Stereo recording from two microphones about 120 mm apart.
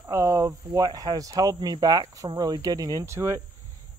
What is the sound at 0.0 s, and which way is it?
Cricket, 25° right (ahead or behind).